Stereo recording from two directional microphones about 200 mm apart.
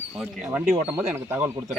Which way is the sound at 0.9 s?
10° right (ahead or behind).